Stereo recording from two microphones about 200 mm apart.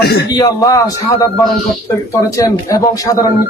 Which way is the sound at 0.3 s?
20° left (ahead or behind).